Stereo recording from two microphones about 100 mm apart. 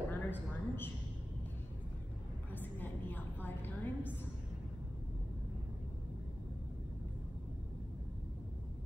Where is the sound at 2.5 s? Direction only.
15° left (ahead or behind).